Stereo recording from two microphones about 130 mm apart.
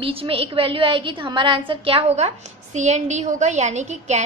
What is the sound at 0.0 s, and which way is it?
A woman's voice, 45° right (ahead or behind).